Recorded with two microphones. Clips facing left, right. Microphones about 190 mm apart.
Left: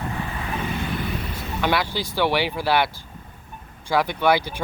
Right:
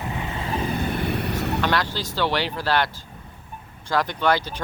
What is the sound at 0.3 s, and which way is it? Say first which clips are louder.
Vehicle: right 2 dB; 30° right (ahead or behind).